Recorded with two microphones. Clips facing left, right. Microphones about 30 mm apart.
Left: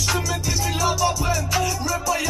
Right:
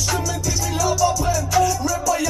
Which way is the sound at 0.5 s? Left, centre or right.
Left.